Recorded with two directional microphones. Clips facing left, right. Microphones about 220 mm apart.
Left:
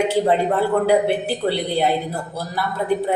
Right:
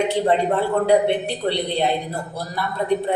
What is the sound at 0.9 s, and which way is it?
Speech, 5° left (ahead or behind).